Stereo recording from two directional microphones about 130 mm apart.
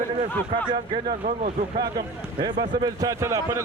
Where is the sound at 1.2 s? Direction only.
70° right (ahead or behind).